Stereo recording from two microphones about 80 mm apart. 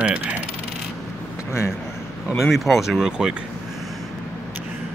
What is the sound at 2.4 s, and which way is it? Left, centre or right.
Speech, centre.